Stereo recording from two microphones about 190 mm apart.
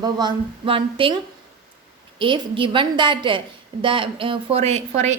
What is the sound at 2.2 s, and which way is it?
A woman's voice, 25° right (ahead or behind).